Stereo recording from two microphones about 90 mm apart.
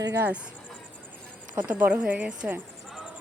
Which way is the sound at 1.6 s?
20° right (ahead or behind).